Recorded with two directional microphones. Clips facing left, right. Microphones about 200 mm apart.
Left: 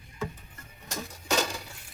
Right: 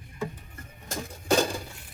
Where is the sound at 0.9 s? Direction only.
50° right (ahead or behind).